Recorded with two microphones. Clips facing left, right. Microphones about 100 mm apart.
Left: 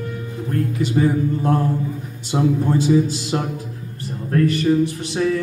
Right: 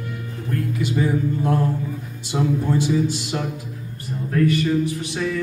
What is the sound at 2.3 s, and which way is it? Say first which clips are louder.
Music: left 3 dB; 35° left (ahead or behind).